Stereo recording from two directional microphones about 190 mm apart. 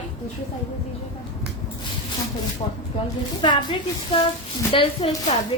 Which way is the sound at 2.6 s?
25° left (ahead or behind).